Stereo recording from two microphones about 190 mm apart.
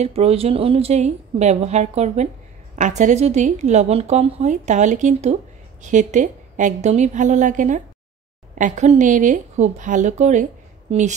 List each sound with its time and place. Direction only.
0.0 s a woman's voice: 30° right (ahead or behind)